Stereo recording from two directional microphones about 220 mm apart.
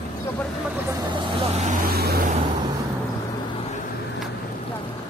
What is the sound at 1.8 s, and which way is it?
Vehicle, 45° right (ahead or behind).